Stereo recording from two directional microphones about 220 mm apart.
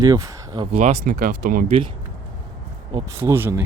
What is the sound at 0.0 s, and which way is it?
Speech, 15° right (ahead or behind).